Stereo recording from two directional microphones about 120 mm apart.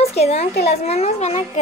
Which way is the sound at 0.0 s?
60° left (ahead or behind).